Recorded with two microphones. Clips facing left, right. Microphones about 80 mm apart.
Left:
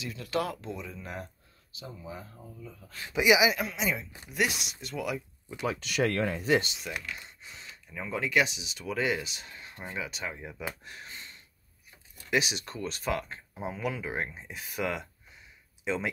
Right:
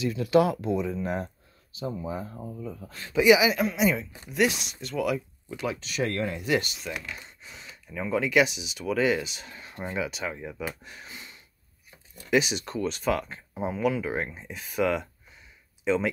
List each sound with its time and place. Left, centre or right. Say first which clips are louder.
0.0 s speech: right 10 dB; centre; by 2.3 s right
2.3 s speech: right 9 dB; right
3.0 s speech: right 4 dB; centre
5.8 s speech: left 3 dB; left
6.3 s speech: even; left
7.2 s speech: right 2 dB; centre
10.8 s a sound: right 1 dB; centre
12.3 s speech: right 5 dB; centre